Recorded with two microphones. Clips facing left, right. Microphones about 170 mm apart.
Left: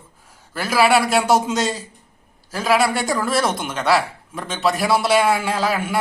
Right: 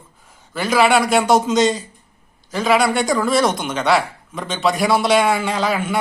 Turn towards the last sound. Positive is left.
turn(degrees=5)  # may be behind; listen again after turning